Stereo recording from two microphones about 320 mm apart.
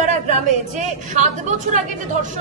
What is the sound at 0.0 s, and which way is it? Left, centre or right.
A woman's voice, right.